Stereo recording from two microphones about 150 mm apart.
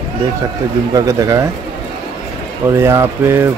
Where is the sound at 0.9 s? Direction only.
20° right (ahead or behind).